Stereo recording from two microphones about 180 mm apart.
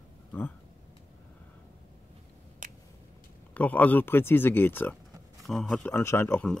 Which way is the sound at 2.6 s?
50° right (ahead or behind).